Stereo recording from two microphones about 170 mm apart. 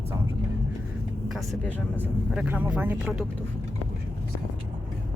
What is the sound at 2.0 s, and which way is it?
Speech, 5° right (ahead or behind).